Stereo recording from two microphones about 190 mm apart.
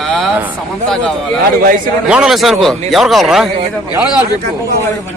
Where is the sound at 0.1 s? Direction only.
Centre (ahead or behind).